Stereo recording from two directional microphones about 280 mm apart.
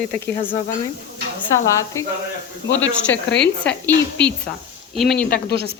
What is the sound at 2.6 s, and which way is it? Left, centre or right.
Speech, left.